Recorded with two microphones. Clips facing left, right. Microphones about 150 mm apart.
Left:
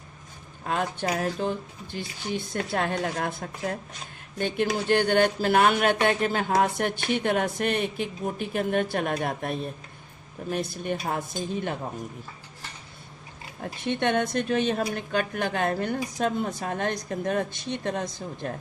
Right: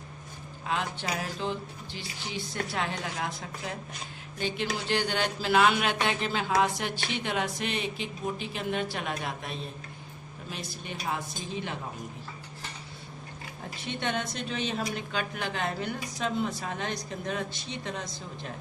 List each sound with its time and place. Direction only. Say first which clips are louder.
0.6 s speech: left 4 dB; 50° left (ahead or behind)
13.8 s speech: left 7 dB; 55° left (ahead or behind)